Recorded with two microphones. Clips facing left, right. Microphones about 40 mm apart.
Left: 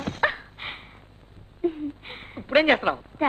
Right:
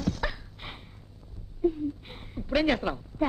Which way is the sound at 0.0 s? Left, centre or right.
Left.